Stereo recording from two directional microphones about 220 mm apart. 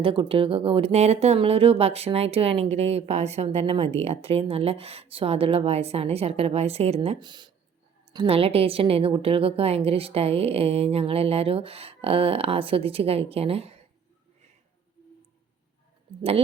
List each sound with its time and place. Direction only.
0.0 s a woman's voice: 25° right (ahead or behind)